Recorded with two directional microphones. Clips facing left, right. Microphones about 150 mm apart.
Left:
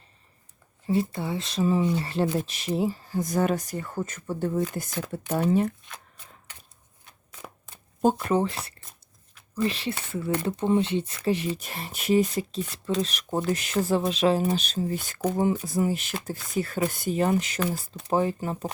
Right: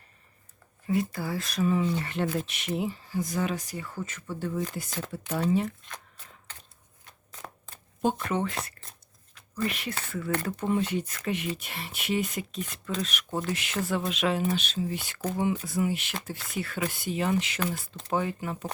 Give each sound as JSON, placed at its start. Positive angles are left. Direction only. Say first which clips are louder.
{"t": 0.9, "sound": "speech", "louder": "left 2 dB", "side_deg": 25}
{"t": 8.2, "sound": "speech", "louder": "left 5 dB", "side_deg": 30}